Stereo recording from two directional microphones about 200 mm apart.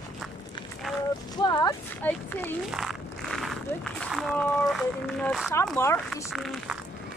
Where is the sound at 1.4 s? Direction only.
20° left (ahead or behind).